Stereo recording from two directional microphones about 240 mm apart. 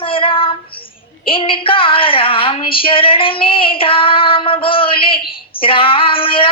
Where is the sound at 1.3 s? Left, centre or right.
Left.